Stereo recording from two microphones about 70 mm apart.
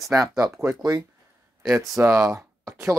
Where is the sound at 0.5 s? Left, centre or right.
Right.